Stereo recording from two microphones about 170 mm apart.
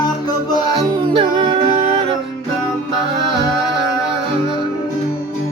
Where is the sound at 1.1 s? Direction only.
30° right (ahead or behind).